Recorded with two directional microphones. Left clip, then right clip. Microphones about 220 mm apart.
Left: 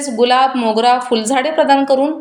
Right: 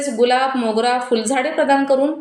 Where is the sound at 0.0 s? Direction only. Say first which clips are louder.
Left 4 dB; 30° left (ahead or behind).